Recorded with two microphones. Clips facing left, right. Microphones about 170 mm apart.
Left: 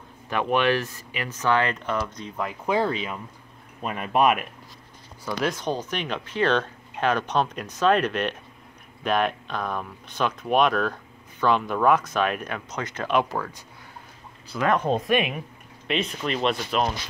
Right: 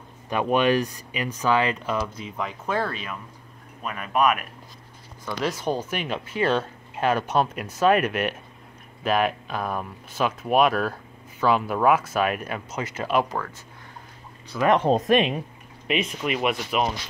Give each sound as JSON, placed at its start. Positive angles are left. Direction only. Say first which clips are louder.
{"t": 0.3, "sound": "speech", "louder": "right 2 dB", "side_deg": -15}
{"t": 2.6, "sound": "speech", "louder": "left 4 dB", "side_deg": 15}
{"t": 3.8, "sound": "speech", "louder": "left 1 dB", "side_deg": 35}
{"t": 5.2, "sound": "speech", "louder": "even", "side_deg": 0}
{"t": 14.5, "sound": "speech", "louder": "right 2 dB", "side_deg": 5}
{"t": 15.0, "sound": "speech", "louder": "right 3 dB", "side_deg": -35}
{"t": 15.9, "sound": "speech", "louder": "right 1 dB", "side_deg": -10}